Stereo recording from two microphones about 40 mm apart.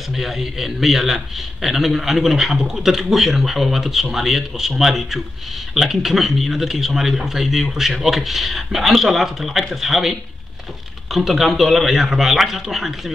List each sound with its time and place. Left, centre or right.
0.1 s a man's voice: centre